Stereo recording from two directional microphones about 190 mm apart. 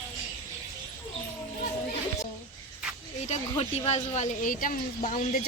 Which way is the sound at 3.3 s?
35° left (ahead or behind).